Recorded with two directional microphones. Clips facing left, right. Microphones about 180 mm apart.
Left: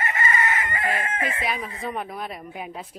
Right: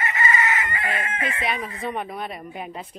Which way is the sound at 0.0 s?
45° left (ahead or behind).